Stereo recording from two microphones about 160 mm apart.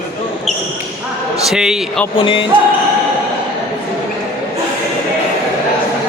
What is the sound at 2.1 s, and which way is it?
Speech, 30° left (ahead or behind).